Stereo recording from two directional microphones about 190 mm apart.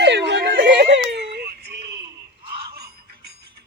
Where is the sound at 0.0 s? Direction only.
65° right (ahead or behind).